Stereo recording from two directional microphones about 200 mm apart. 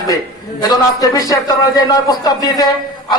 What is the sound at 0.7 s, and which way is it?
Speech, 15° left (ahead or behind).